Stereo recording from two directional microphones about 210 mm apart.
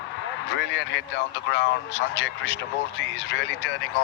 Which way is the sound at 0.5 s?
55° left (ahead or behind).